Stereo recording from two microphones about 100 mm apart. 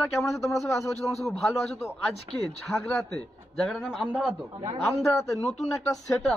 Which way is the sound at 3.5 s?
5° left (ahead or behind).